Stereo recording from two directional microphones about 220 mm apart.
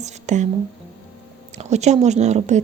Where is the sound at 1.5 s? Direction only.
30° right (ahead or behind).